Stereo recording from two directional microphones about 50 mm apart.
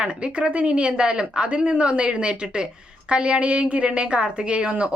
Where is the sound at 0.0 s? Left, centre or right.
Right.